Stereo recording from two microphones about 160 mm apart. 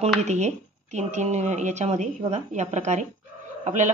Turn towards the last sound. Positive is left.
turn(degrees=-50)  # may be behind; listen again after turning